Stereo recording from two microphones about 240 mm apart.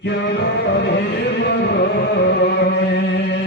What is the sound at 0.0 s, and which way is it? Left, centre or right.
Music, left.